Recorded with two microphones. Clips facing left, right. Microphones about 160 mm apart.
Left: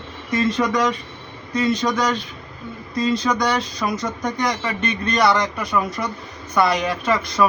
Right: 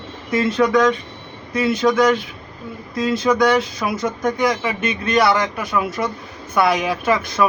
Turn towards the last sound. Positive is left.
turn(degrees=-5)  # may be behind; listen again after turning